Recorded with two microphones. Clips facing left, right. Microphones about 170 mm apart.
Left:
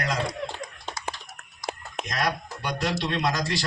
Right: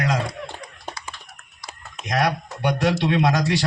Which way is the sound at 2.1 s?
75° right (ahead or behind).